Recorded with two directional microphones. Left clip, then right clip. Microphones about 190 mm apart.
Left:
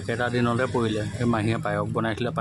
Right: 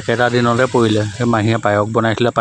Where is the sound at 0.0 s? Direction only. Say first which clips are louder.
Right 11 dB; 35° right (ahead or behind).